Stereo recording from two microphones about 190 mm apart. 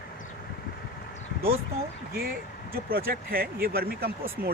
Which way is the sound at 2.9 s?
50° right (ahead or behind).